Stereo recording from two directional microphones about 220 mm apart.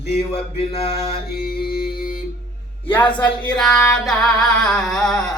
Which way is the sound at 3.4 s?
5° left (ahead or behind).